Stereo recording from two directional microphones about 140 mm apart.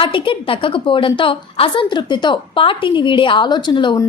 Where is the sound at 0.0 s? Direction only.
40° left (ahead or behind).